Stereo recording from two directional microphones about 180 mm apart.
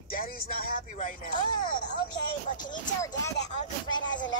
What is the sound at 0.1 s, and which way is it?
Speech, 55° left (ahead or behind).